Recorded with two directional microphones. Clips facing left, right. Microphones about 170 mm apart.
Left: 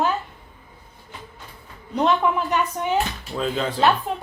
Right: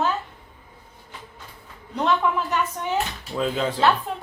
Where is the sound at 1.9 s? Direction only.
20° left (ahead or behind).